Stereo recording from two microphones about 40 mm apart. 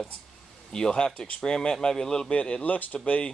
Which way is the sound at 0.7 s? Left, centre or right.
Left.